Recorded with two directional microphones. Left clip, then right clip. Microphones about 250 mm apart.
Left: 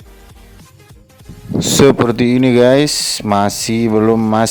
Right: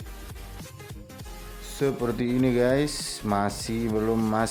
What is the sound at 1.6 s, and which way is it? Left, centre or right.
Speech, left.